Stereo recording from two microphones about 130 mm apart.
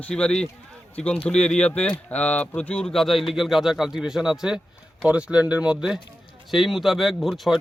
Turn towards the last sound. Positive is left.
turn(degrees=0)  # may be behind; listen again after turning